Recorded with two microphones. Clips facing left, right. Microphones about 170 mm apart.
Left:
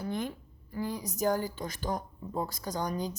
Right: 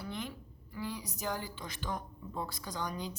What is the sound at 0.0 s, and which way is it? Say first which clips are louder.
A woman's voice: left 7 dB; 45° left (ahead or behind).